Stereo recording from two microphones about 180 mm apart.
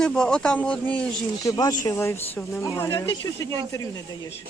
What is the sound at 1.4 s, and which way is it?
Speech, 20° left (ahead or behind).